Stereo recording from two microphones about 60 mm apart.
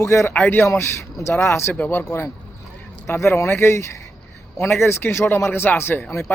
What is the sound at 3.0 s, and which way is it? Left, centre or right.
A man's voice, left.